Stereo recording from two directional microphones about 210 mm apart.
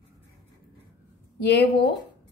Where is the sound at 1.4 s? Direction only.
55° left (ahead or behind).